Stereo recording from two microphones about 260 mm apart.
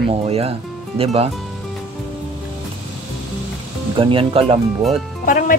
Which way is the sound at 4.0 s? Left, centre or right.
Centre.